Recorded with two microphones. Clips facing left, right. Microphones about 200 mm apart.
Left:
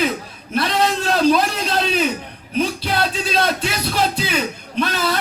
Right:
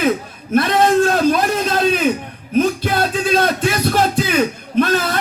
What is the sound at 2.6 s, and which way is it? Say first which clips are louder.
Music: right 4 dB; 45° right (ahead or behind).